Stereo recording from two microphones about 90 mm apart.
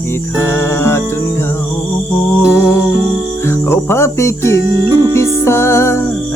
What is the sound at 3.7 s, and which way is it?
Cricket, 25° left (ahead or behind).